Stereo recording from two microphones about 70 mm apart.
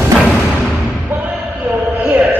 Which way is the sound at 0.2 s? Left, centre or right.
Centre.